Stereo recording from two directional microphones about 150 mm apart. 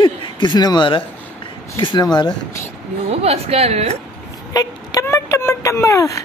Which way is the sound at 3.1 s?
45° right (ahead or behind).